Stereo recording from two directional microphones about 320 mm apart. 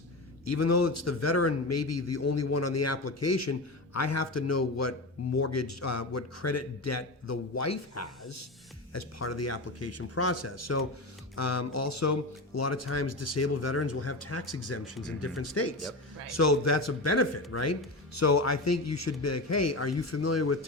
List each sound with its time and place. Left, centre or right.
0.4 s a man's voice: left